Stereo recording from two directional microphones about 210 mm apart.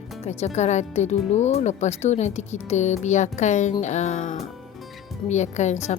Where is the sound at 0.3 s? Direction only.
30° left (ahead or behind).